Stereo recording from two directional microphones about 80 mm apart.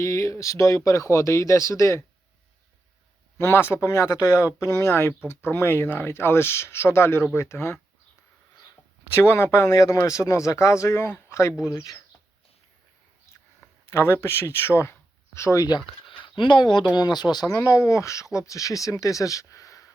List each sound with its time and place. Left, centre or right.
0.0 s speech: left
3.3 s speech: left
9.1 s speech: left
13.6 s speech: left
16.2 s speech: left
17.5 s speech: left